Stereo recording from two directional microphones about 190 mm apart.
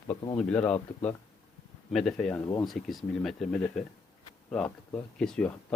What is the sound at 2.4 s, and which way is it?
Speech, 15° left (ahead or behind).